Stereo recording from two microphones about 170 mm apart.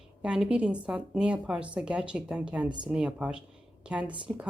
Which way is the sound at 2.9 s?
5° right (ahead or behind).